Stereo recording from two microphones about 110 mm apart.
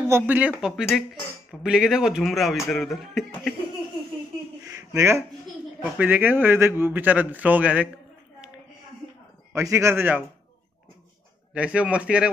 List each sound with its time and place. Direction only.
0.1 s a man's voice: 15° right (ahead or behind)
0.6 s speech: 5° right (ahead or behind)
4.6 s a sound: 30° right (ahead or behind)
5.9 s a man's voice: 15° right (ahead or behind)
9.5 s a man's voice: 25° right (ahead or behind)
11.5 s a man's voice: 10° right (ahead or behind)